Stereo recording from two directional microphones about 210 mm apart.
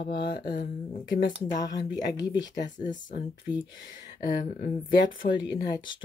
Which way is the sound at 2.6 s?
35° left (ahead or behind).